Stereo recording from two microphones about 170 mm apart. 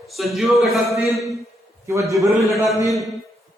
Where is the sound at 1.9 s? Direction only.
20° right (ahead or behind).